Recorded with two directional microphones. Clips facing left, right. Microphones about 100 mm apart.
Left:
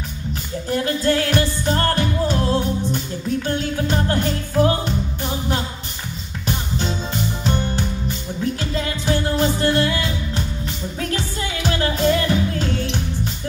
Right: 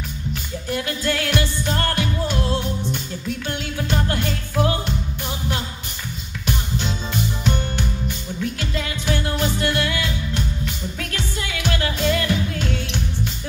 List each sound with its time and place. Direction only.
0.3 s music: 35° left (ahead or behind)
7.4 s music: 35° left (ahead or behind)